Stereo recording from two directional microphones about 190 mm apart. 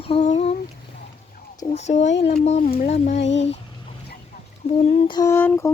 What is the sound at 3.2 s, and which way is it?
Speech, 70° left (ahead or behind).